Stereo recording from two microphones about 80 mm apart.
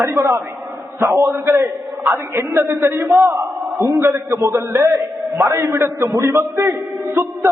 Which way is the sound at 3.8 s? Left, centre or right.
Right.